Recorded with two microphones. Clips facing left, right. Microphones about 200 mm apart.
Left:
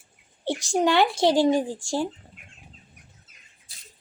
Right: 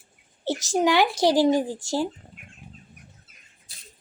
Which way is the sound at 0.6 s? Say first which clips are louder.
Even; centre (ahead or behind).